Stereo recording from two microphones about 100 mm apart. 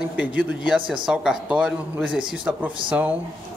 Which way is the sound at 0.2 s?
15° right (ahead or behind).